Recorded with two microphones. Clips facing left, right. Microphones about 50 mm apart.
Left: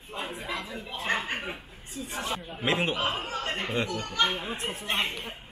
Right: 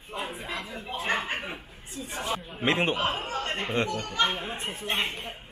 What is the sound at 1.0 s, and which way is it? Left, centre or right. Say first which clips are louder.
Speech: even; right.